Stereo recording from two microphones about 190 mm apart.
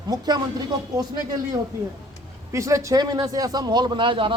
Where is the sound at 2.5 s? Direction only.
15° right (ahead or behind).